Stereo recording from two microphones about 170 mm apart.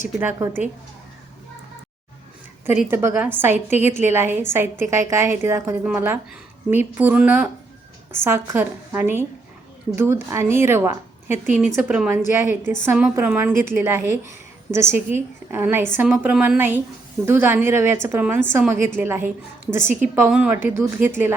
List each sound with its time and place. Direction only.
0.2 s a woman's voice: 15° right (ahead or behind)
2.9 s a woman's voice: 15° right (ahead or behind)